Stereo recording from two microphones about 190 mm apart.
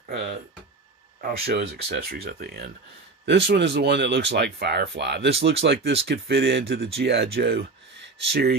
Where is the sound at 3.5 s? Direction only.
65° right (ahead or behind).